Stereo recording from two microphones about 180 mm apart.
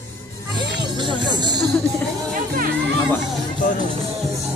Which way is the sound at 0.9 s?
25° right (ahead or behind).